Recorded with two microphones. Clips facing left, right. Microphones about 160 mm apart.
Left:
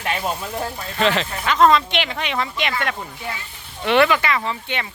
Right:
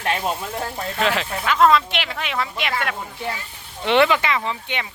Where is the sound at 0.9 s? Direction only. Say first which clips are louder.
Left 3 dB; 5° right (ahead or behind).